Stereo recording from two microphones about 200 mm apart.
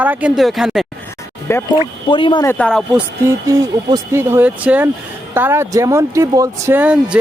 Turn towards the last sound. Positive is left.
turn(degrees=-5)  # may be behind; listen again after turning